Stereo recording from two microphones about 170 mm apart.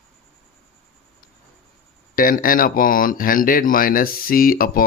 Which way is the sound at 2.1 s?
55° left (ahead or behind).